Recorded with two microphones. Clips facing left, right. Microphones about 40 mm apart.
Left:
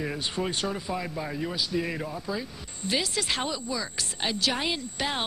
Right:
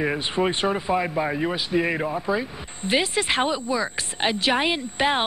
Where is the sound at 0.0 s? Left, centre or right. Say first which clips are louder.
Right 7 dB; right.